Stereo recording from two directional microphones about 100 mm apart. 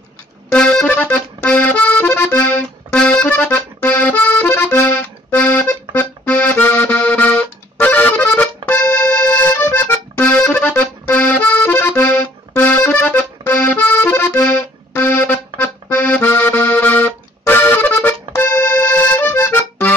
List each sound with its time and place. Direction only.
0.5 s accordion: 10° left (ahead or behind)